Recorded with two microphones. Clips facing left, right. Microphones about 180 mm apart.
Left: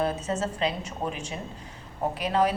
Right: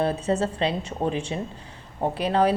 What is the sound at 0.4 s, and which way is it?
A woman's voice, 30° right (ahead or behind).